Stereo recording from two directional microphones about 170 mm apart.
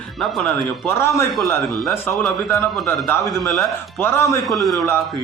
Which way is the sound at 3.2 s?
Centre (ahead or behind).